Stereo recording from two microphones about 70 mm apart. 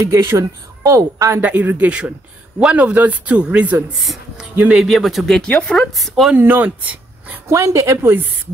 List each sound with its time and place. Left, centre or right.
0.1 s speech: right
1.4 s speech: right
4.0 s speech: centre
5.5 s speech: centre
6.3 s speech: right
7.4 s a woman's voice: right